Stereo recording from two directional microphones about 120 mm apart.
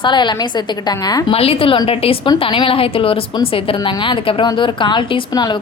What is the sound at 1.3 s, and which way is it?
A woman's voice, 55° left (ahead or behind).